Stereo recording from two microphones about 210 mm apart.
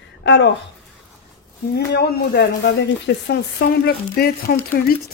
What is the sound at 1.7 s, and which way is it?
Speech, 55° left (ahead or behind).